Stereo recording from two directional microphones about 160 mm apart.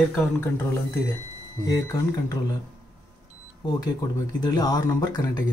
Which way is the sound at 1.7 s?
20° left (ahead or behind).